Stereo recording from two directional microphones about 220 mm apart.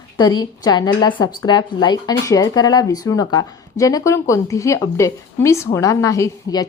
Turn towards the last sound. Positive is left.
turn(degrees=15)  # may be behind; listen again after turning